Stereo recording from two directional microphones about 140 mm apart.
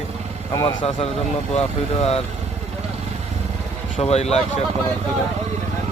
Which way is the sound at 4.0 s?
50° left (ahead or behind).